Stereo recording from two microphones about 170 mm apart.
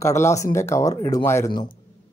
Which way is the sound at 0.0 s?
15° left (ahead or behind).